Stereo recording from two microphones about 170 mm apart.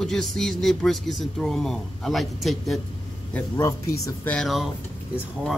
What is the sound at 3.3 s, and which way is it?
Speech, 15° left (ahead or behind).